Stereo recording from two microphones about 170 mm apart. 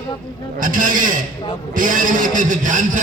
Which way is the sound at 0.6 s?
50° right (ahead or behind).